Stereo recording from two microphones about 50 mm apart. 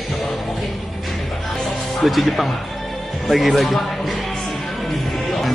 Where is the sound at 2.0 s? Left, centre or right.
Centre.